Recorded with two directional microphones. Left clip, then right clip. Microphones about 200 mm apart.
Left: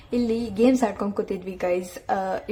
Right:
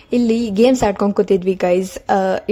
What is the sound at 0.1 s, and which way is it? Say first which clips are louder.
A woman's voice: right 8 dB; 35° right (ahead or behind).